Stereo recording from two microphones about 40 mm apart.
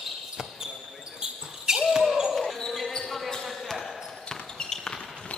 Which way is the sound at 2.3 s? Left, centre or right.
Centre.